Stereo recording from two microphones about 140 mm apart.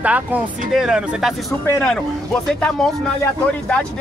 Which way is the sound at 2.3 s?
5° left (ahead or behind).